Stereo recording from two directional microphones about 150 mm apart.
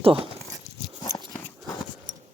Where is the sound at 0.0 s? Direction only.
40° right (ahead or behind).